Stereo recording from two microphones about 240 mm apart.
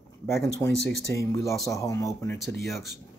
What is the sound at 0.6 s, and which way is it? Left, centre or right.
Speech, centre.